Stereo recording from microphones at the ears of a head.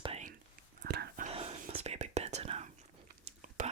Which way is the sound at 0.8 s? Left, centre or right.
Right.